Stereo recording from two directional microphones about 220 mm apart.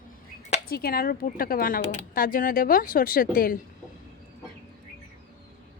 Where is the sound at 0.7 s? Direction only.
45° left (ahead or behind).